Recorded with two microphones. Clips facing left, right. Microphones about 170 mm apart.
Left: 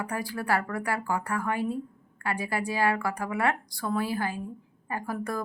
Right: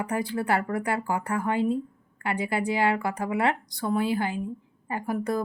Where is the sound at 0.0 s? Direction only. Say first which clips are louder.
Right 4 dB; 20° right (ahead or behind).